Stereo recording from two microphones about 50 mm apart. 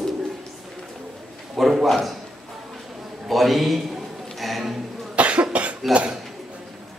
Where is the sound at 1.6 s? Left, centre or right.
Centre.